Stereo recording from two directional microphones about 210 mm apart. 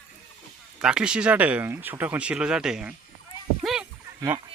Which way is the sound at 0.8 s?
5° right (ahead or behind).